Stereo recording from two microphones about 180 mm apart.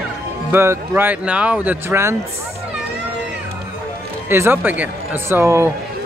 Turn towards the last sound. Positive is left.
turn(degrees=-15)  # may be behind; listen again after turning